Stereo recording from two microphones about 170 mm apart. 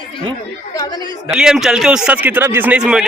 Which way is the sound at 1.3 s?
5° right (ahead or behind).